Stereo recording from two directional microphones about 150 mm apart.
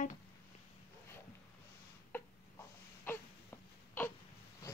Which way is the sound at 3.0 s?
15° left (ahead or behind).